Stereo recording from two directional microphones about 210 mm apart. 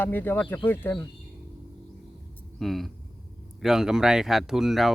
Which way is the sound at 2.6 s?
Centre (ahead or behind).